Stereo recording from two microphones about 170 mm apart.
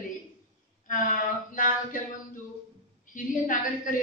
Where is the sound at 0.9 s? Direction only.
55° left (ahead or behind).